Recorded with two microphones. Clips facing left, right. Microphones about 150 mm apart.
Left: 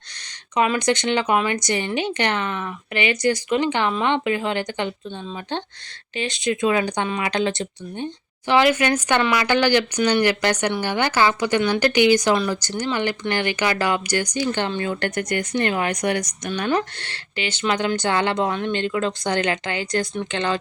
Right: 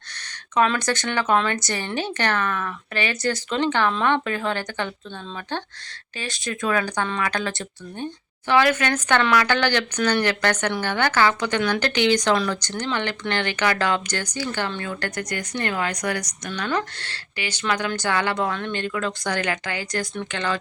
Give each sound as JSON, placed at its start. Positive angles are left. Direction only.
{"t": 0.5, "sound": "a woman's voice", "side_deg": 15}